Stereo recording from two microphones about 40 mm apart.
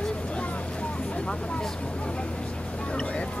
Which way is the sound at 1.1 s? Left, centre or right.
Left.